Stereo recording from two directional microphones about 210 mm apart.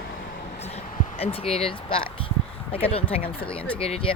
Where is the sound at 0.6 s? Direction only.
30° left (ahead or behind).